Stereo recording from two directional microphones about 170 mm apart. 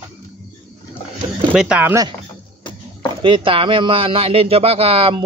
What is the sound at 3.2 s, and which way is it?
Speech, 30° right (ahead or behind).